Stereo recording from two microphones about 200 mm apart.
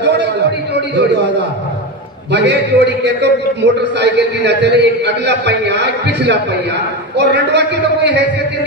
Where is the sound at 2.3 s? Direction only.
60° right (ahead or behind).